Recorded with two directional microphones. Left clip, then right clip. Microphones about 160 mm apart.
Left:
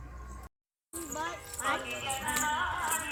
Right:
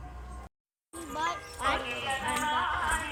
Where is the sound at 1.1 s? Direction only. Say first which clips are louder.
Right 5 dB; 5° right (ahead or behind).